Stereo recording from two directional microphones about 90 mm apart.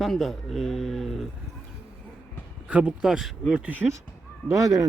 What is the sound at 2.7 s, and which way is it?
Speech, 10° right (ahead or behind).